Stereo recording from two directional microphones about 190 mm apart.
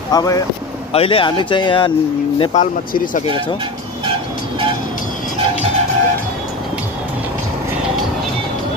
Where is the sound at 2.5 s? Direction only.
40° left (ahead or behind).